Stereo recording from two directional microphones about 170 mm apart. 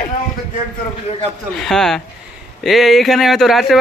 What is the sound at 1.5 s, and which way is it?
A man's voice, centre (ahead or behind).